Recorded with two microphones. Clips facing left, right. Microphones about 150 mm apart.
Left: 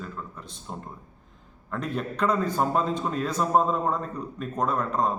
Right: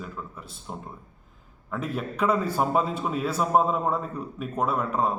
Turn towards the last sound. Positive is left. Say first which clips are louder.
# even
turn(degrees=-5)  # may be behind; listen again after turning